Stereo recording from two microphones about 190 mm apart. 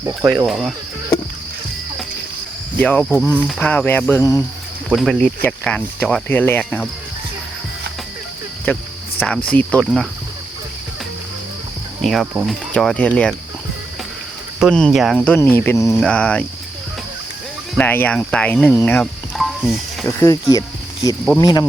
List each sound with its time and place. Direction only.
0.0 s speech: 10° right (ahead or behind)
2.7 s speech: 5° left (ahead or behind)
4.9 s speech: centre (ahead or behind)
8.6 s cricket: 5° left (ahead or behind)
9.5 s speech: 5° left (ahead or behind)
12.0 s speech: centre (ahead or behind)
14.6 s speech: 5° left (ahead or behind)
17.7 s speech: 10° left (ahead or behind)
19.4 s music: centre (ahead or behind)
20.1 s speech: 15° left (ahead or behind)
20.5 s cricket: 20° left (ahead or behind)
21.4 s speech: 20° left (ahead or behind)